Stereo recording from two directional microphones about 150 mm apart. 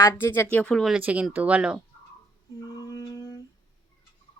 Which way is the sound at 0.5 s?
5° left (ahead or behind).